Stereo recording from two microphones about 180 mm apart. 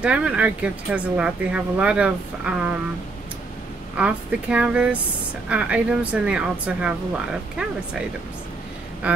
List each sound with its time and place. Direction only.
0.0 s speech: 5° right (ahead or behind)
3.9 s speech: 5° right (ahead or behind)
9.0 s quack: 5° right (ahead or behind)